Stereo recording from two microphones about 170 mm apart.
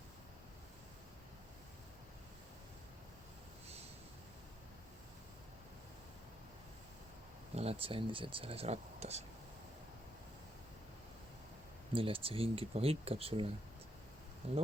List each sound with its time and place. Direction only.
7.5 s speech: 35° right (ahead or behind)
11.9 s speech: 30° right (ahead or behind)